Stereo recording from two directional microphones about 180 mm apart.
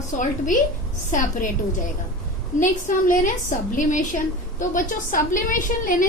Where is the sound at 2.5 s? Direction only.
45° left (ahead or behind).